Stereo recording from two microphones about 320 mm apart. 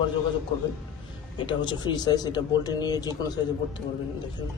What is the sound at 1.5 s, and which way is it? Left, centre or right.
Speech, centre.